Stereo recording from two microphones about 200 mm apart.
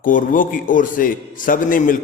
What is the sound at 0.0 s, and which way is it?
A man's voice, 40° left (ahead or behind).